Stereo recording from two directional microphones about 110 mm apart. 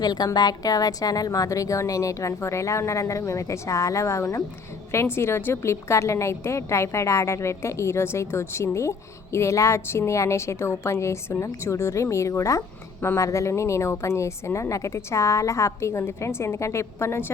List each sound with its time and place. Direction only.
0.0 s a woman's voice: 35° left (ahead or behind)